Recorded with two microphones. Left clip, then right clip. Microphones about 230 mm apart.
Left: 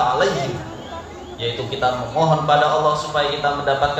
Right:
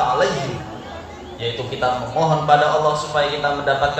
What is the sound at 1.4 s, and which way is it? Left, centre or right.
A man's voice, right.